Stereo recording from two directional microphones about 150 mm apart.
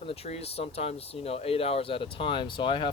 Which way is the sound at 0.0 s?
40° left (ahead or behind).